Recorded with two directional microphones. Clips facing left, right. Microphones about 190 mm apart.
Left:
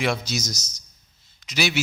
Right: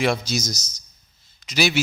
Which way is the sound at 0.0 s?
35° right (ahead or behind).